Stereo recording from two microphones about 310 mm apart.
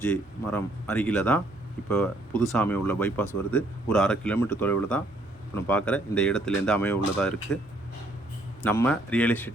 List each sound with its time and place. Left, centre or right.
0.0 s speech: centre
8.6 s speech: centre